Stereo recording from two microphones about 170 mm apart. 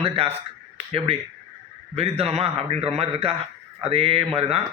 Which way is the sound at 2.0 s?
35° right (ahead or behind).